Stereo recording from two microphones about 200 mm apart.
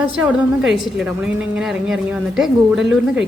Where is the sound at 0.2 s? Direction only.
5° right (ahead or behind).